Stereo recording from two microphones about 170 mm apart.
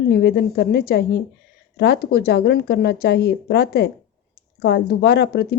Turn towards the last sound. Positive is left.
turn(degrees=70)  # may be behind; listen again after turning